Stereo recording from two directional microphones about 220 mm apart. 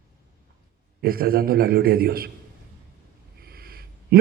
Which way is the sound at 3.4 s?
45° right (ahead or behind).